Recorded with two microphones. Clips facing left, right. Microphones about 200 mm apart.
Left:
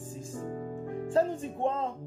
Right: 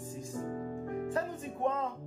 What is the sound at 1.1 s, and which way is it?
Speech, 30° left (ahead or behind).